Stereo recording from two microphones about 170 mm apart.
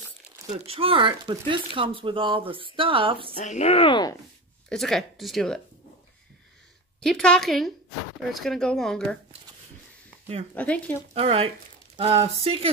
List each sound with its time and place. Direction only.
0.5 s speech: 35° right (ahead or behind)
3.3 s speech: 45° left (ahead or behind); by 4.2 s 25° left (ahead or behind)
4.6 s speech: 5° left (ahead or behind)
7.0 s speech: 5° left (ahead or behind)
10.5 s speech: 10° left (ahead or behind)
11.1 s speech: 35° right (ahead or behind)